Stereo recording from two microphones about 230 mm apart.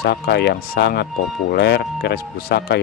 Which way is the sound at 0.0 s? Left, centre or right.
Left.